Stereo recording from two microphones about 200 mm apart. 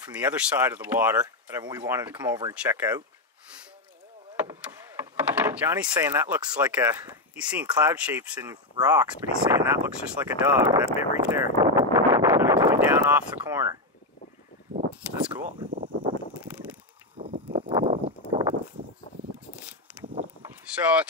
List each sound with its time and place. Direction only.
0.1 s speech: 5° right (ahead or behind)
1.2 s speech: 20° right (ahead or behind)
2.0 s speech: 10° right (ahead or behind)
4.4 s door: 10° right (ahead or behind)
7.8 s speech: 5° right (ahead or behind)
9.0 s speech: 5° right (ahead or behind)
11.0 s a sound: 10° right (ahead or behind)
15.0 s speech: 5° right (ahead or behind)
15.4 s a sound: 45° right (ahead or behind)
17.2 s a sound: 30° right (ahead or behind)
19.1 s a sound: 35° left (ahead or behind)
20.0 s vehicle: 5° right (ahead or behind)